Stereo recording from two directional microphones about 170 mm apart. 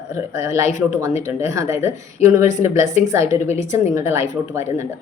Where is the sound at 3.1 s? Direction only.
15° right (ahead or behind).